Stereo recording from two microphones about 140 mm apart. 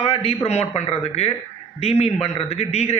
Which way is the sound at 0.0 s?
45° left (ahead or behind).